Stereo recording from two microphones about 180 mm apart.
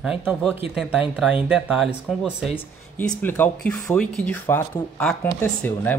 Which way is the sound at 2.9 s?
10° left (ahead or behind).